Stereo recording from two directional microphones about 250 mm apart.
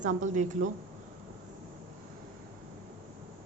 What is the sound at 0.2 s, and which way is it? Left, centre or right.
Speech, right.